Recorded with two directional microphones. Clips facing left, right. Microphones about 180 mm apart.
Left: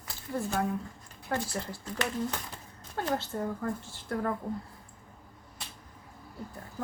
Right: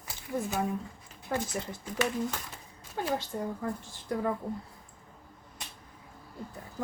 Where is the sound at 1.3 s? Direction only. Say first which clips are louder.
Even; 15° right (ahead or behind).